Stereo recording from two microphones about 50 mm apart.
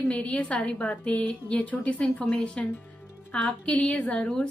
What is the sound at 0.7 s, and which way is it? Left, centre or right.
Speech, left.